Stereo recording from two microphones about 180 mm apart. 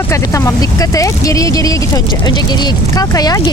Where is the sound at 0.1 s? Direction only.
20° left (ahead or behind).